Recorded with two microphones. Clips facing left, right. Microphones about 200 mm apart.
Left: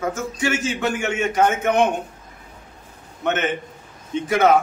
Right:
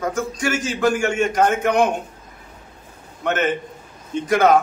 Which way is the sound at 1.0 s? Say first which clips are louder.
Right 1 dB; 5° left (ahead or behind).